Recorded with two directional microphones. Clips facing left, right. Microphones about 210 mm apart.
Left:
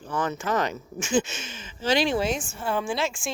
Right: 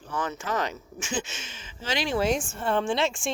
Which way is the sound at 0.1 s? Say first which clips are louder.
Left 3 dB; 50° left (ahead or behind).